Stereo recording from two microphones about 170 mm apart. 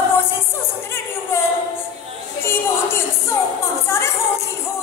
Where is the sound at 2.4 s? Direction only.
15° left (ahead or behind).